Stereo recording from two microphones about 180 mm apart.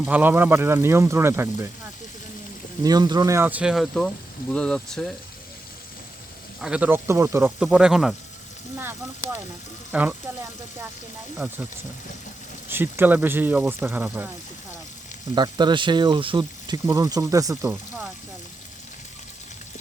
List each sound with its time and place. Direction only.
0.0 s speech: 10° right (ahead or behind)
2.8 s speech: 20° right (ahead or behind); by 5.1 s centre (ahead or behind)
6.6 s speech: 5° right (ahead or behind)
7.6 s speech: 5° right (ahead or behind)
11.3 s speech: 10° right (ahead or behind)
12.6 s speech: 10° right (ahead or behind)
15.4 s speech: 25° right (ahead or behind); by 18.1 s 10° right (ahead or behind)